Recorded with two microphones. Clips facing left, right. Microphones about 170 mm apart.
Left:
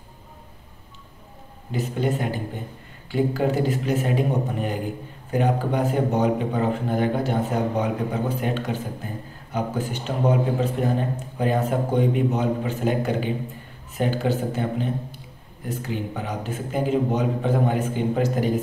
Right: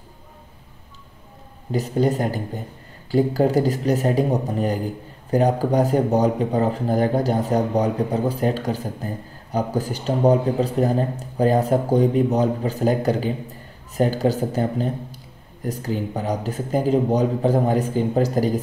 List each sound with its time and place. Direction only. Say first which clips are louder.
1.7 s speech: right 4 dB; 40° right (ahead or behind)